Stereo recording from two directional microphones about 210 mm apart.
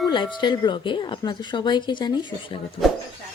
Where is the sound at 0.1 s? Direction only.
20° left (ahead or behind).